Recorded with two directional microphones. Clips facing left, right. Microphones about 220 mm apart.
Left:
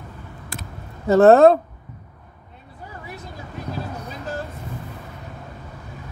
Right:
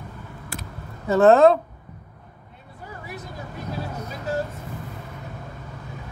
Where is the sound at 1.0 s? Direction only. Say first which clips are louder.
Left 3 dB; 40° left (ahead or behind).